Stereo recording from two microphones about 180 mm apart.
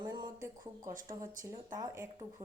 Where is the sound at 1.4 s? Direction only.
20° right (ahead or behind).